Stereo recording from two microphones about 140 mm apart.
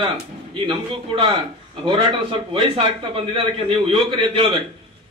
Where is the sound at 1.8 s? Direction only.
40° right (ahead or behind).